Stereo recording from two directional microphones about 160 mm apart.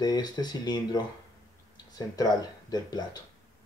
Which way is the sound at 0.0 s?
25° left (ahead or behind).